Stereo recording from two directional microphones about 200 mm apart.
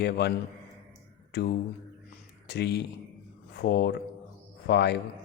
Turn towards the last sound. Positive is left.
turn(degrees=55)  # may be behind; listen again after turning